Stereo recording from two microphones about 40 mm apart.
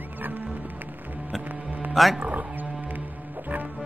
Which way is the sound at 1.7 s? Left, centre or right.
Right.